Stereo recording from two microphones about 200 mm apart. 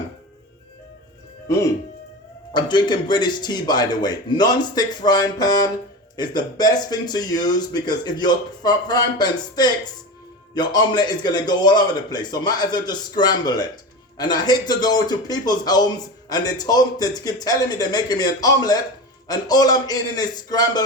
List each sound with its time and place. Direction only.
1.5 s speech: 15° left (ahead or behind)